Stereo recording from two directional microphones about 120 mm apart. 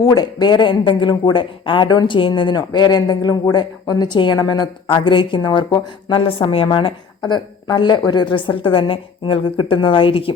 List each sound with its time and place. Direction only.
0.0 s a woman's voice: 35° left (ahead or behind); by 10.3 s 50° left (ahead or behind)